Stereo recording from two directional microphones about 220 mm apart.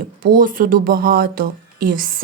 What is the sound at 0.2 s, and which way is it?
Speech, 40° right (ahead or behind).